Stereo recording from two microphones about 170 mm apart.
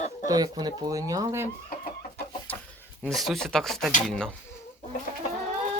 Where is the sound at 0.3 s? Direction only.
20° right (ahead or behind).